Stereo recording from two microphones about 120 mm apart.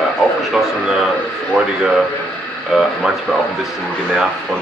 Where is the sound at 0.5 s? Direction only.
5° right (ahead or behind).